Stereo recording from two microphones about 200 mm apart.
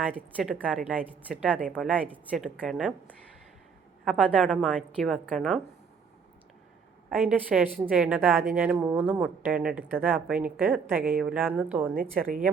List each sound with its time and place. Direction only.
0.1 s a woman's voice: 5° right (ahead or behind)
4.0 s speech: 5° right (ahead or behind)
7.1 s a woman's voice: 5° right (ahead or behind)